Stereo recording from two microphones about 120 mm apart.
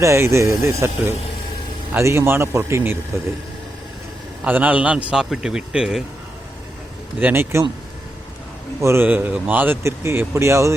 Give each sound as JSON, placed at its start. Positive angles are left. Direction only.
{"t": 0.0, "sound": "speech", "side_deg": -25}
{"t": 4.4, "sound": "a man's voice", "side_deg": -15}
{"t": 7.2, "sound": "a man's voice", "side_deg": -15}
{"t": 8.8, "sound": "speech", "side_deg": -20}